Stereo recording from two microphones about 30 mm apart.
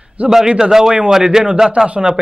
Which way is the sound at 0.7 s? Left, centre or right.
Centre.